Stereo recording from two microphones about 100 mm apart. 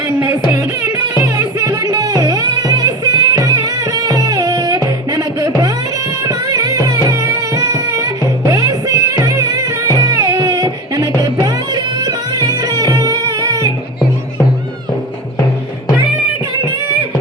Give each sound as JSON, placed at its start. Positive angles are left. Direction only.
{"t": 1.5, "sound": "music", "side_deg": -35}